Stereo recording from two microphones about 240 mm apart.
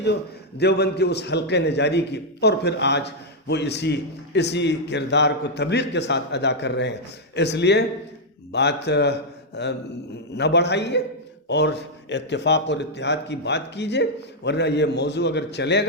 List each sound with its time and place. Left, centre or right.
0.6 s a man's voice: left